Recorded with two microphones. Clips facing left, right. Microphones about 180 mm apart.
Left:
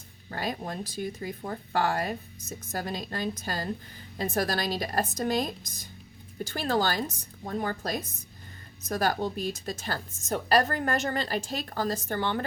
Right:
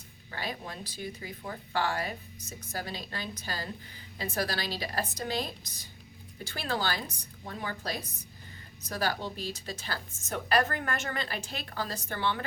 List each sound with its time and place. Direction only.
0.3 s speech: 45° left (ahead or behind)